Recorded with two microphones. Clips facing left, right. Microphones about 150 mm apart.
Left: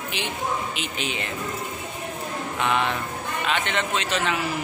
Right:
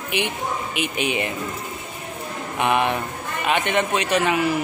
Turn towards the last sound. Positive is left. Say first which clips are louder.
# right 5 dB
turn(degrees=-10)  # may be behind; listen again after turning